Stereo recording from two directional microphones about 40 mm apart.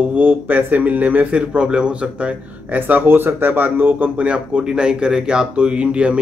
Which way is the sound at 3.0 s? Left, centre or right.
Right.